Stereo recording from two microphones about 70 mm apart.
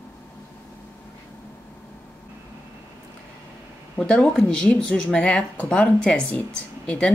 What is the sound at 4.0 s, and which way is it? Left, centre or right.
Speech, centre.